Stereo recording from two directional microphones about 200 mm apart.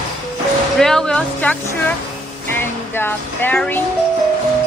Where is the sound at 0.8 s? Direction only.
Centre (ahead or behind).